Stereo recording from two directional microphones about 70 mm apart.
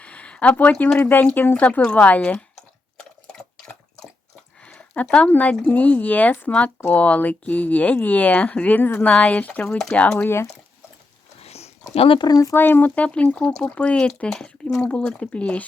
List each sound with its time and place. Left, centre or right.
0.0 s a sound: centre
0.7 s speech: centre
3.0 s a sound: centre
5.3 s speech: left
9.6 s speech: centre
9.9 s speech: left
10.2 s speech: left
12.2 s speech: left
12.5 s speech: left